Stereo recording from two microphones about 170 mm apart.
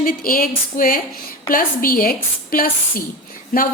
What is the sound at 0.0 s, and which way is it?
A woman's voice, 55° left (ahead or behind).